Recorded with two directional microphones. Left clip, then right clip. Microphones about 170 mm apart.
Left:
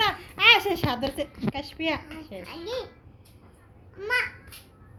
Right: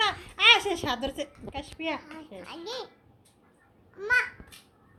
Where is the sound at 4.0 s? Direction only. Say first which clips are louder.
Right 1 dB; 65° right (ahead or behind).